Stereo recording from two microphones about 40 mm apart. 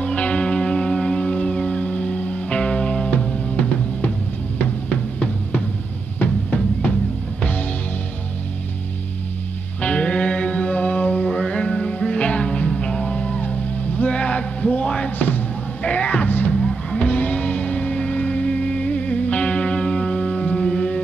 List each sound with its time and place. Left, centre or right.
0.0 s music: left
4.6 s music: left
9.8 s music: left
11.2 s music: left
12.6 s music: centre; by 14.9 s left
15.0 s music: left
15.8 s music: left
16.5 s music: centre
17.0 s music: left